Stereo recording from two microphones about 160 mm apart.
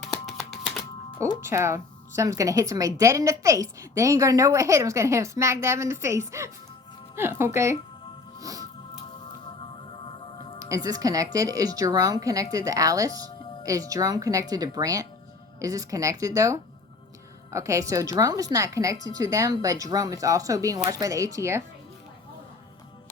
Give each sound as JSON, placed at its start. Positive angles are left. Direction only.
{"t": 0.0, "sound": "a sound", "side_deg": 0}
{"t": 1.4, "sound": "a woman's voice", "side_deg": -15}
{"t": 8.4, "sound": "music", "side_deg": -20}
{"t": 10.7, "sound": "a woman's voice", "side_deg": -20}